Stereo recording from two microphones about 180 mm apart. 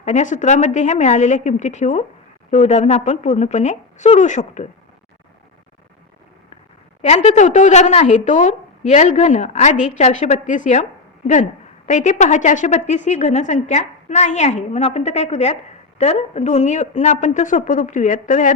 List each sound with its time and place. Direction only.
0.0 s a woman's voice: 40° left (ahead or behind)
7.0 s a woman's voice: 40° left (ahead or behind)
11.9 s a woman's voice: 40° left (ahead or behind)